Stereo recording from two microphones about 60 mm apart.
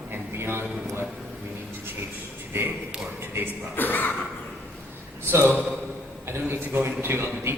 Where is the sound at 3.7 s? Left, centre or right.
Left.